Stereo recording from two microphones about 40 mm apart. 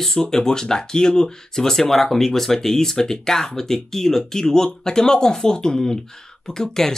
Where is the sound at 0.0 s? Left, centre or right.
Centre.